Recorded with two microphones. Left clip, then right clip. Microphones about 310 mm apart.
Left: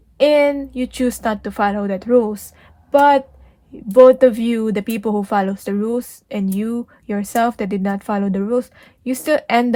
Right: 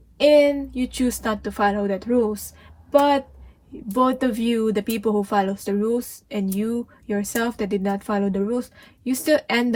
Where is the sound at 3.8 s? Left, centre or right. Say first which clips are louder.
Left 12 dB; left.